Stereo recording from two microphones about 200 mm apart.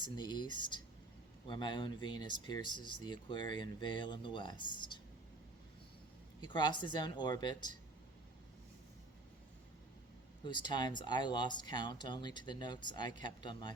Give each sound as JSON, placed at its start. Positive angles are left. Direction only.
{"t": 0.0, "sound": "speech", "side_deg": 20}
{"t": 1.5, "sound": "speech", "side_deg": 25}
{"t": 6.4, "sound": "speech", "side_deg": 20}
{"t": 10.4, "sound": "speech", "side_deg": 20}